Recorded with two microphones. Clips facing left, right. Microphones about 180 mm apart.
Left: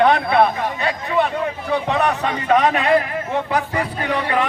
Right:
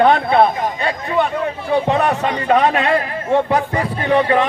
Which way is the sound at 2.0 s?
35° right (ahead or behind).